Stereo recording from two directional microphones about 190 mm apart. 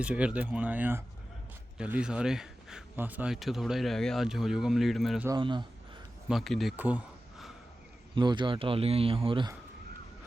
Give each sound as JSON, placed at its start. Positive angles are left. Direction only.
{"t": 0.0, "sound": "speech", "side_deg": -5}
{"t": 5.4, "sound": "speech", "side_deg": -25}
{"t": 6.2, "sound": "speech", "side_deg": 0}
{"t": 8.1, "sound": "speech", "side_deg": -25}